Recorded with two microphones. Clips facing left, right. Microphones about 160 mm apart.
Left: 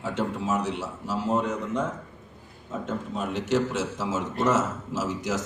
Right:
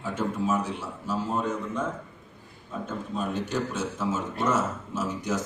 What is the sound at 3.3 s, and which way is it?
A man's voice, 90° left.